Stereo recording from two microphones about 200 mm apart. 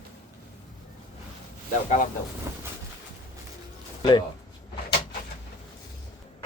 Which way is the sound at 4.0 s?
25° left (ahead or behind).